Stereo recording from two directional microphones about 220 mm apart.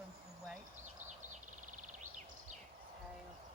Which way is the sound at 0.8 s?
35° right (ahead or behind).